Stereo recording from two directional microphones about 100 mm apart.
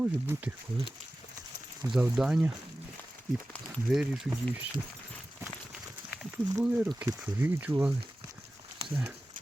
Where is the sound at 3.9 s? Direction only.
5° right (ahead or behind).